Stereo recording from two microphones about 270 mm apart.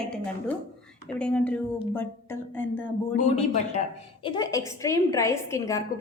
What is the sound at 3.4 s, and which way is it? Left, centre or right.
A woman's voice, left.